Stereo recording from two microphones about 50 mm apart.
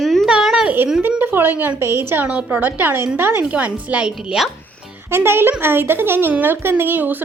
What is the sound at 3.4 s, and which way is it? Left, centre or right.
Speech, right.